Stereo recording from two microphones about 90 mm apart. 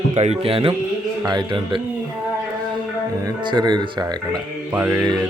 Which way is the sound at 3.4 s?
50° right (ahead or behind).